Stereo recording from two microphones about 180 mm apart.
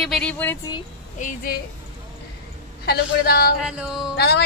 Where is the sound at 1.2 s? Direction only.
55° left (ahead or behind).